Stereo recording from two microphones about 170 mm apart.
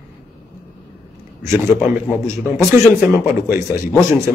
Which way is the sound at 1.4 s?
15° right (ahead or behind).